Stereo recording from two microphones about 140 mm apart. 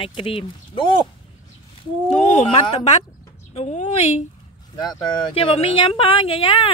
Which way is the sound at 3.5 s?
55° left (ahead or behind).